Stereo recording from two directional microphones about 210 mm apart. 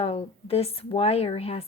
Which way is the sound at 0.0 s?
30° left (ahead or behind).